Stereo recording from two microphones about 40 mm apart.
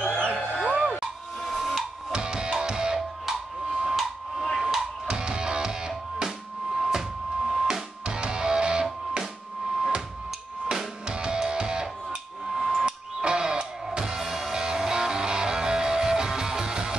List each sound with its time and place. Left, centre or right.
0.7 s music: right
1.4 s printer: centre
2.1 s music: right
3.3 s a sound: centre
3.9 s a sound: centre
5.0 s music: right